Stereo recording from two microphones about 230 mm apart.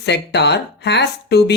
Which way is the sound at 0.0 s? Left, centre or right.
Left.